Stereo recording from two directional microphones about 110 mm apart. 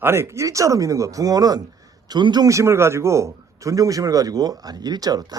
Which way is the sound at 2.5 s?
25° right (ahead or behind).